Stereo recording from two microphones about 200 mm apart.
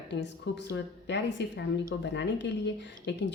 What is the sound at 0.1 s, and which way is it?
A woman's voice, 60° left (ahead or behind).